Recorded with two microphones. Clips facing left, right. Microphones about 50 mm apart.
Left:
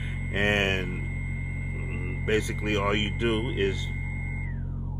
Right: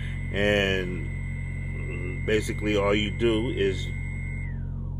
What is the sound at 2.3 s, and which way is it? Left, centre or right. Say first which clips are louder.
Speech: right 2 dB; left.